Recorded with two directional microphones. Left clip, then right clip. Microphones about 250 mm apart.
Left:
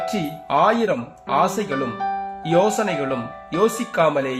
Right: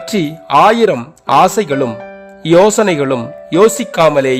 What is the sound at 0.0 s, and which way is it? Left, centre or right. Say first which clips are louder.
Speech: right 7 dB; right.